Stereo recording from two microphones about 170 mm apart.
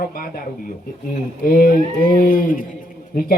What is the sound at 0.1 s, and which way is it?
Speech, 60° left (ahead or behind).